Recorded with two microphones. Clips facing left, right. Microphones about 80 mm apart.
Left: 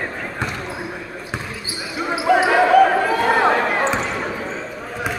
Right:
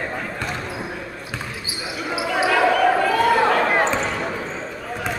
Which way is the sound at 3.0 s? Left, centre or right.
Left.